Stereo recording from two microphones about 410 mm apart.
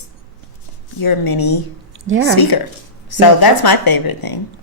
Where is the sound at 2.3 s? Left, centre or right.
Left.